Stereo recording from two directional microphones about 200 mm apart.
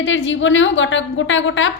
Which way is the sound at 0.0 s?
70° left (ahead or behind).